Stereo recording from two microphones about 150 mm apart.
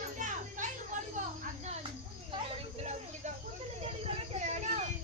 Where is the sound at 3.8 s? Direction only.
45° right (ahead or behind).